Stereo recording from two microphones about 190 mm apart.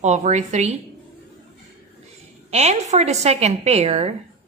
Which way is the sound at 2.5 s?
35° right (ahead or behind).